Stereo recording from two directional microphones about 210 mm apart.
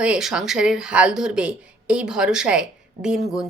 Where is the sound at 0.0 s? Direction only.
5° right (ahead or behind).